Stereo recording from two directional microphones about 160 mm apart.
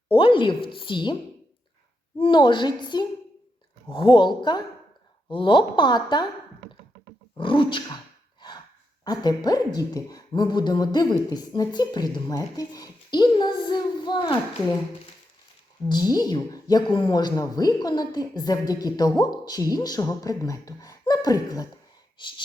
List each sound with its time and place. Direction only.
0.2 s a woman's voice: 30° left (ahead or behind)
2.1 s speech: 30° left (ahead or behind)
7.3 s a woman's voice: 30° left (ahead or behind)
9.0 s speech: 25° left (ahead or behind)
15.9 s speech: 25° left (ahead or behind)